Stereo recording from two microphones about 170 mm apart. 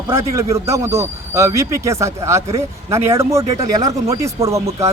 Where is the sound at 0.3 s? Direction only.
20° right (ahead or behind).